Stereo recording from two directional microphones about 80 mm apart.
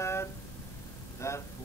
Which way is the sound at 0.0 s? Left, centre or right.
Left.